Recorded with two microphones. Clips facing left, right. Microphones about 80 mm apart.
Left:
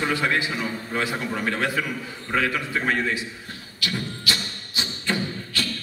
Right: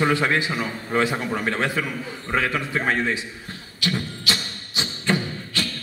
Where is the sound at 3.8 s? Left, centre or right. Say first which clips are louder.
Right 2 dB; right.